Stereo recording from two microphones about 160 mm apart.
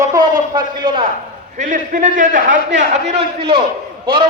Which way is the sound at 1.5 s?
55° right (ahead or behind).